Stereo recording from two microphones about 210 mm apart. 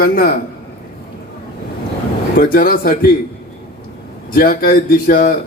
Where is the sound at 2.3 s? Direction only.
40° left (ahead or behind).